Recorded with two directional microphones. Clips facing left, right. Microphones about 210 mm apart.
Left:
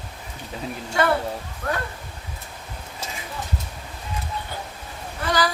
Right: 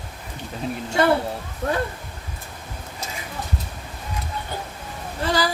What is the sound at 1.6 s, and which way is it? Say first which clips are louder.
Speech: right 3 dB; 30° right (ahead or behind).